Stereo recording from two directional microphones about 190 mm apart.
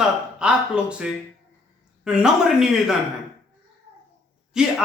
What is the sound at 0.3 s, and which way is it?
A man's voice, 5° right (ahead or behind).